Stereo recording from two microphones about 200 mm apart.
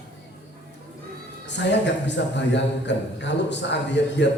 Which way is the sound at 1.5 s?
60° left (ahead or behind).